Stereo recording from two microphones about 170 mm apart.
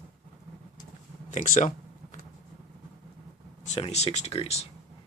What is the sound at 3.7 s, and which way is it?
Speech, 40° left (ahead or behind).